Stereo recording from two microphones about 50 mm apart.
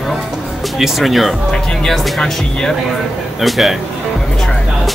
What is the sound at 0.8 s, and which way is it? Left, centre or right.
Speech, centre.